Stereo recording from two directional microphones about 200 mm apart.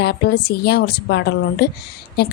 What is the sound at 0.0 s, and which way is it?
Speech, 55° left (ahead or behind).